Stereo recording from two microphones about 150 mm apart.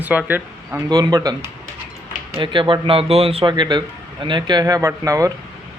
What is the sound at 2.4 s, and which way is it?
A man's voice, 35° right (ahead or behind).